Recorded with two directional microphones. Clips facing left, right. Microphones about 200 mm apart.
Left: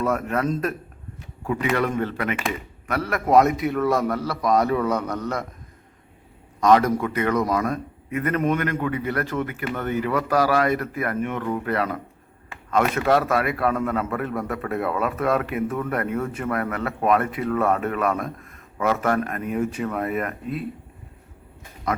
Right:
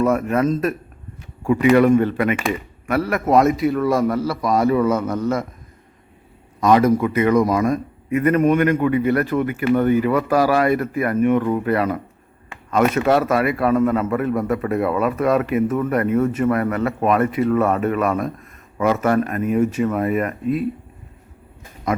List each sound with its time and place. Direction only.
0.0 s a man's voice: 10° right (ahead or behind)
6.6 s a man's voice: 5° right (ahead or behind)
10.5 s a man's voice: 5° right (ahead or behind)